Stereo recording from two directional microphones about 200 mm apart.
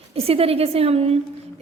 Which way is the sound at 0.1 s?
30° right (ahead or behind).